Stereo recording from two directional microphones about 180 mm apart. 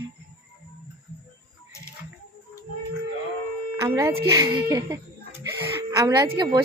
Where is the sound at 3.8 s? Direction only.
15° right (ahead or behind).